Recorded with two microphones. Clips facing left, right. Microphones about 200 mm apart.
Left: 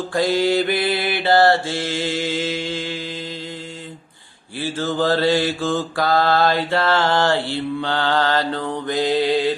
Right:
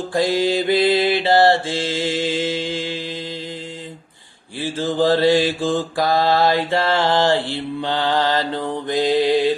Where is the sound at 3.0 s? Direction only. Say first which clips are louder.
Right 1 dB; 30° right (ahead or behind).